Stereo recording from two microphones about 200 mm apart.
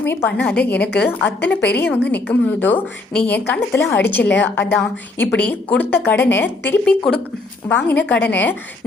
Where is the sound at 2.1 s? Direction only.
10° left (ahead or behind).